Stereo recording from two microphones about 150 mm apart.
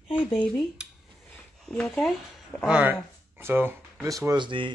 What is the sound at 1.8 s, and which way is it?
Speech, 5° left (ahead or behind).